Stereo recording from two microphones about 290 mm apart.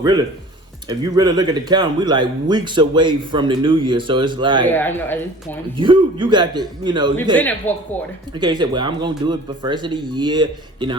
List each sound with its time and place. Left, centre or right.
0.9 s speech: centre
4.6 s speech: centre
5.7 s speech: centre
7.6 s speech: centre
8.4 s speech: centre